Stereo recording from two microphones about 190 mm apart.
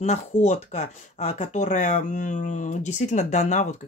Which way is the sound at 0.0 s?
35° left (ahead or behind).